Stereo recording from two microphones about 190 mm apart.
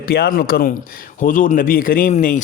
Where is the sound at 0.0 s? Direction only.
50° left (ahead or behind).